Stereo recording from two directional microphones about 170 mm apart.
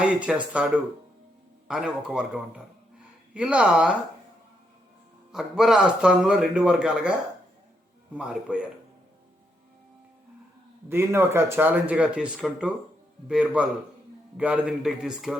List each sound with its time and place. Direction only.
0.0 s a man's voice: 5° right (ahead or behind)
5.3 s a man's voice: 5° right (ahead or behind)
10.8 s a man's voice: 15° right (ahead or behind)